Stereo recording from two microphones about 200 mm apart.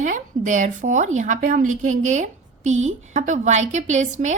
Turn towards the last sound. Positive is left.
turn(degrees=-35)  # may be behind; listen again after turning